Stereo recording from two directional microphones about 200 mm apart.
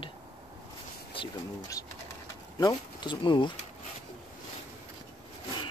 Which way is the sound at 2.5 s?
20° left (ahead or behind).